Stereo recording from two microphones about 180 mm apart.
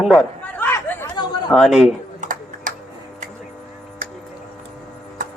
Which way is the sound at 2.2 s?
50° right (ahead or behind).